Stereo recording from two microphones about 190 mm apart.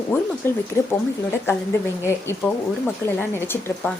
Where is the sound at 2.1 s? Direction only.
15° left (ahead or behind).